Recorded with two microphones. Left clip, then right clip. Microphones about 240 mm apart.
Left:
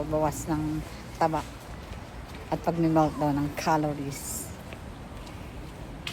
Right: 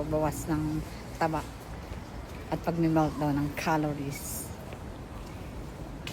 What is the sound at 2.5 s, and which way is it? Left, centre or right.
A woman's voice, centre.